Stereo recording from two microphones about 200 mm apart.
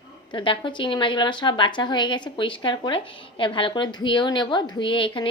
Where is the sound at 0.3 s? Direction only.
25° left (ahead or behind).